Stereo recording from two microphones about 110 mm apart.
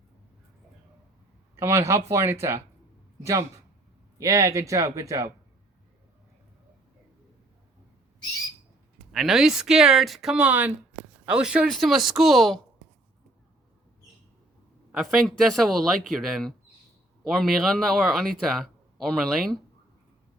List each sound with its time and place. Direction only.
1.5 s speech: 25° right (ahead or behind)
4.2 s speech: 30° right (ahead or behind)
9.1 s speech: 5° right (ahead or behind)
14.9 s speech: centre (ahead or behind)